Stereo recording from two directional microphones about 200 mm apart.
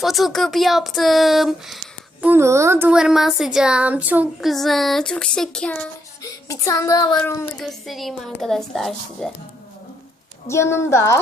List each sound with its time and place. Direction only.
0.0 s speech: centre (ahead or behind)
2.2 s speech: 10° right (ahead or behind); by 5.9 s 5° left (ahead or behind)
6.2 s child singing: 15° left (ahead or behind)
7.2 s a woman's voice: 10° left (ahead or behind)
7.6 s speech: centre (ahead or behind)
10.5 s a woman's voice: 15° left (ahead or behind)